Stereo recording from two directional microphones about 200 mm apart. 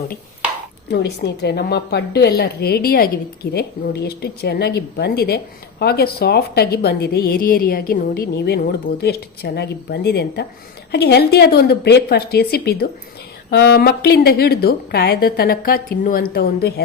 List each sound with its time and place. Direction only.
0.9 s a woman's voice: 55° left (ahead or behind)